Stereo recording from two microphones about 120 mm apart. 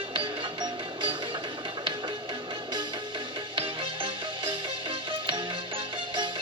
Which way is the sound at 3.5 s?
50° right (ahead or behind).